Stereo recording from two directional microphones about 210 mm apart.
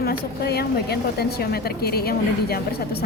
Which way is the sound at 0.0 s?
50° left (ahead or behind).